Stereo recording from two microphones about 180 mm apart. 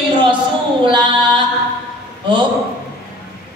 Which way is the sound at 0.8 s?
25° right (ahead or behind).